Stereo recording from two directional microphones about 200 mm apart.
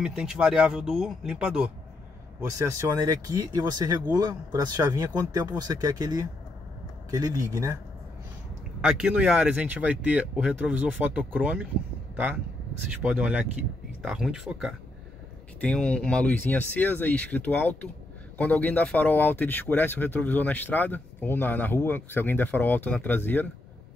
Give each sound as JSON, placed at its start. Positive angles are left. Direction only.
{"t": 0.0, "sound": "speech", "side_deg": -5}
{"t": 8.8, "sound": "speech", "side_deg": -5}
{"t": 12.9, "sound": "speech", "side_deg": -5}